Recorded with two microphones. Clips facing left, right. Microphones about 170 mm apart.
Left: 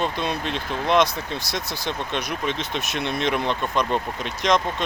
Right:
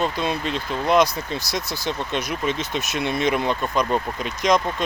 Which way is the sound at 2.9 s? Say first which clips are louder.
Right 3 dB; 50° right (ahead or behind).